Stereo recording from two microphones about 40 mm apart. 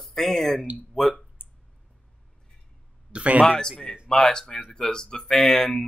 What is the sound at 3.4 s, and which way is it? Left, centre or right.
Speech, centre.